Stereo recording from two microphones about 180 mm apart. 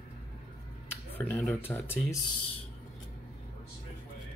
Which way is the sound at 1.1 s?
10° left (ahead or behind).